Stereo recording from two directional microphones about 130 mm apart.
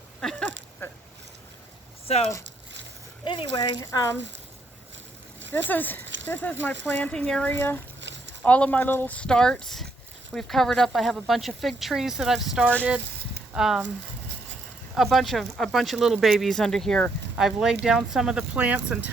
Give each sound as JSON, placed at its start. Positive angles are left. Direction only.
{"t": 0.2, "sound": "speech", "side_deg": 5}
{"t": 0.8, "sound": "a sound", "side_deg": 15}
{"t": 2.0, "sound": "speech", "side_deg": 50}
{"t": 3.2, "sound": "speech", "side_deg": 35}
{"t": 5.6, "sound": "speech", "side_deg": 15}
{"t": 14.9, "sound": "speech", "side_deg": 0}